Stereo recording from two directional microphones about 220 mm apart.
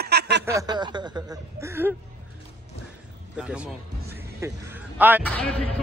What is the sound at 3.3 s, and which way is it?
Speech, 5° right (ahead or behind).